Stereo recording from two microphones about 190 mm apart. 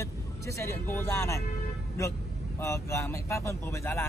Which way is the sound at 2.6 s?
15° left (ahead or behind).